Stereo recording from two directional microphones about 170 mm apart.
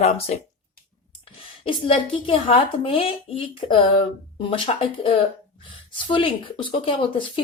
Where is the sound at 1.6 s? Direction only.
30° left (ahead or behind).